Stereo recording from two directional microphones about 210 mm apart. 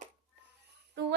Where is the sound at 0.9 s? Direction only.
55° right (ahead or behind).